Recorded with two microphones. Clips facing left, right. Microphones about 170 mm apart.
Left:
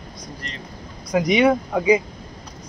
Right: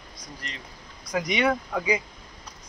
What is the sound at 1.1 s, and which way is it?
Speech, 20° left (ahead or behind).